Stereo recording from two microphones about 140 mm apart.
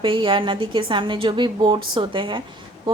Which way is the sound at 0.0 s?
35° right (ahead or behind).